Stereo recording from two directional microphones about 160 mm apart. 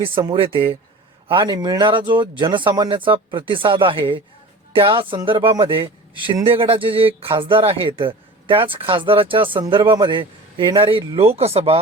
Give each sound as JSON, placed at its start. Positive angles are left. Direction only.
{"t": 0.3, "sound": "speech", "side_deg": -35}